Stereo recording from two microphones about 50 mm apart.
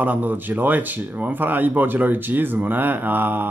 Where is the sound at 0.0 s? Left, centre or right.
Right.